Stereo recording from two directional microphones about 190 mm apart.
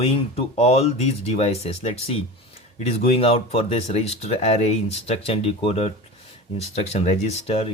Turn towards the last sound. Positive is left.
turn(degrees=30)  # may be behind; listen again after turning